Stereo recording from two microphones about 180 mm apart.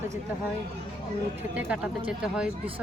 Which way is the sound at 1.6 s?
5° right (ahead or behind).